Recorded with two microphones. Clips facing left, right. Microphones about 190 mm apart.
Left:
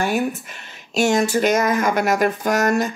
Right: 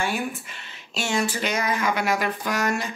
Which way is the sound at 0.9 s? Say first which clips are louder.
Left 8 dB; 45° left (ahead or behind).